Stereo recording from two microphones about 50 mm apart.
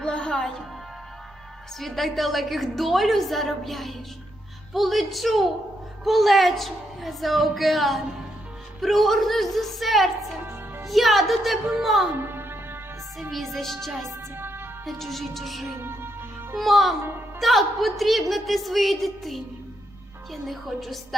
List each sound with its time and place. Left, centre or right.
0.0 s music: centre
1.8 s a woman's voice: centre
12.1 s music: right
13.3 s a woman's voice: centre
14.3 s music: right
14.8 s a woman's voice: centre
15.6 s music: right
16.6 s a woman's voice: centre